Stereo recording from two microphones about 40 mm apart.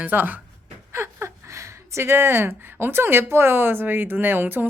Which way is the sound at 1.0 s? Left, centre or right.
Right.